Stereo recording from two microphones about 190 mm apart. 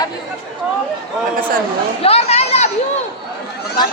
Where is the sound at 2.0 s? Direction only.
35° left (ahead or behind).